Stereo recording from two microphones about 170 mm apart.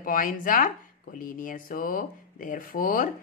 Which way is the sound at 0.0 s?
55° left (ahead or behind).